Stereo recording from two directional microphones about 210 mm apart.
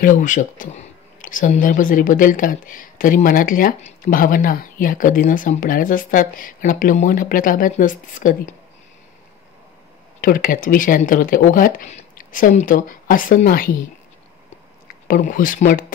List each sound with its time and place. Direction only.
0.0 s speech: 35° left (ahead or behind)
10.2 s speech: 40° left (ahead or behind)
15.0 s speech: 40° left (ahead or behind)